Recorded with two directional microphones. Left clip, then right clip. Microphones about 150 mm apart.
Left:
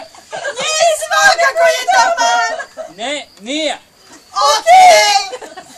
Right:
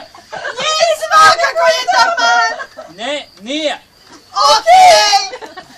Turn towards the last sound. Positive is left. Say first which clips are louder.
# even
turn(degrees=10)  # may be behind; listen again after turning